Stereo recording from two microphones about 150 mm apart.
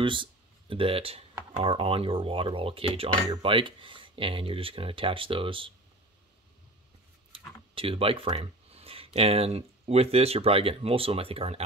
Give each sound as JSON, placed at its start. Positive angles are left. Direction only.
{"t": 0.0, "sound": "speech", "side_deg": -35}
{"t": 7.3, "sound": "speech", "side_deg": -35}